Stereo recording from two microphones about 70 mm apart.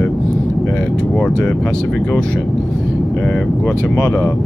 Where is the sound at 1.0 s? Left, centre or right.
Centre.